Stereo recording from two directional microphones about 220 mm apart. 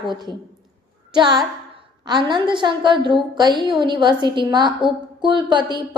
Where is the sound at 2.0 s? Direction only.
20° right (ahead or behind).